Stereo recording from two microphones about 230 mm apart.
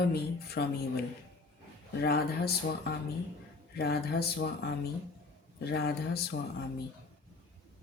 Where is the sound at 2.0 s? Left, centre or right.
Left.